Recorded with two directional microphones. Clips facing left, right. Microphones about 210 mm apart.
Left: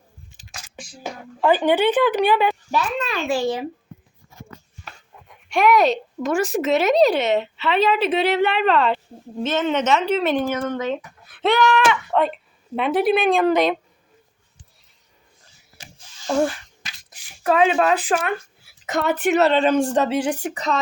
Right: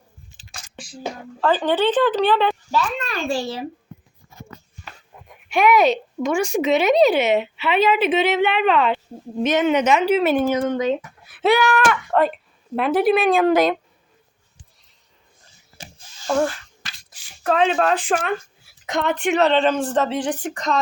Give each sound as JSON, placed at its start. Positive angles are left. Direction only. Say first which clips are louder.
{"t": 1.4, "sound": "a child's voice", "louder": "left 2 dB", "side_deg": 15}
{"t": 5.5, "sound": "speech", "louder": "right 1 dB", "side_deg": 0}
{"t": 9.4, "sound": "speech", "louder": "right 3 dB", "side_deg": -15}
{"t": 11.3, "sound": "a sound", "louder": "right 1 dB", "side_deg": -5}
{"t": 11.8, "sound": "speech", "louder": "right 1 dB", "side_deg": 0}
{"t": 16.8, "sound": "a sound", "louder": "even", "side_deg": 10}
{"t": 18.9, "sound": "a child's voice", "louder": "left 1 dB", "side_deg": 5}